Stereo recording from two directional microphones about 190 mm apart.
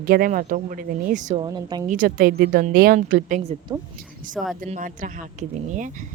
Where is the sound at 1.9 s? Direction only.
50° right (ahead or behind).